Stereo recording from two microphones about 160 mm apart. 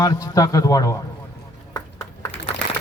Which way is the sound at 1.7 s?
20° left (ahead or behind).